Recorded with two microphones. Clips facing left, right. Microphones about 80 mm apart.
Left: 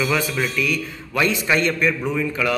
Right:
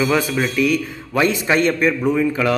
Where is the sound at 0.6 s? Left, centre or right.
Right.